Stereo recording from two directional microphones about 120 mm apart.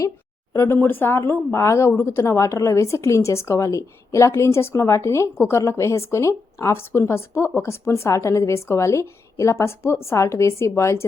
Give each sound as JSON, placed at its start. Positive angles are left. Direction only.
{"t": 0.5, "sound": "speech", "side_deg": 20}